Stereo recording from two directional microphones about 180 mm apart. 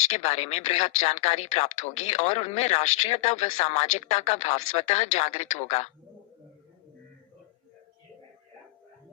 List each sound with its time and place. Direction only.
0.2 s speech: 35° left (ahead or behind)